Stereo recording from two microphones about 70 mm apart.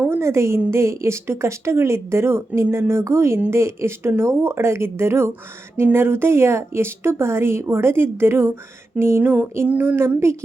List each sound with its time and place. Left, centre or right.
0.0 s a woman's voice: right
9.2 s a sound: right
9.7 s speech: right